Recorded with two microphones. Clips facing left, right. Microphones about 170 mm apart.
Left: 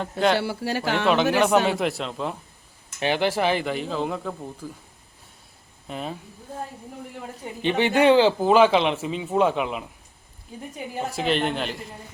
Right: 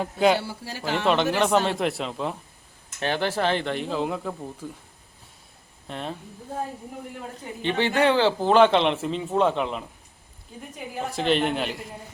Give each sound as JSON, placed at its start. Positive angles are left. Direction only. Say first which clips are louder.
{"t": 0.0, "sound": "speech", "louder": "right 1 dB", "side_deg": -5}
{"t": 0.3, "sound": "speech", "louder": "left 6 dB", "side_deg": 75}
{"t": 1.0, "sound": "speech", "louder": "left 1 dB", "side_deg": 0}
{"t": 3.0, "sound": "speech", "louder": "left 2 dB", "side_deg": 10}
{"t": 5.9, "sound": "speech", "louder": "left 1 dB", "side_deg": 5}
{"t": 7.6, "sound": "speech", "louder": "left 3 dB", "side_deg": 15}
{"t": 11.0, "sound": "speech", "louder": "right 1 dB", "side_deg": 5}